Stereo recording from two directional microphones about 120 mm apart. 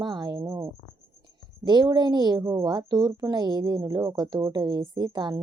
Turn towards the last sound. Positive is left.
turn(degrees=-35)  # may be behind; listen again after turning